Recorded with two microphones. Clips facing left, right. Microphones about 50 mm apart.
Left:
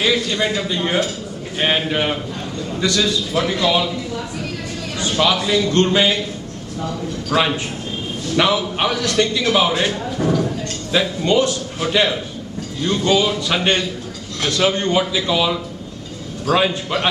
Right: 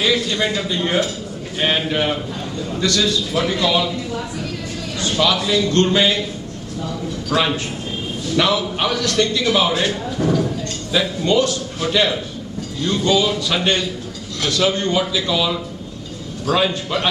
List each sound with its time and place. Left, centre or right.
0.0 s a man's voice: centre
4.9 s a man's voice: left
7.2 s a man's voice: centre
14.4 s a man's voice: left